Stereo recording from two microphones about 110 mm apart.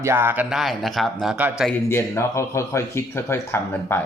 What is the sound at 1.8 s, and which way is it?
Speech, 25° left (ahead or behind).